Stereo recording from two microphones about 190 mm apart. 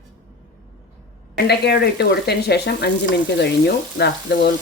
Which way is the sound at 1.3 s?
60° left (ahead or behind).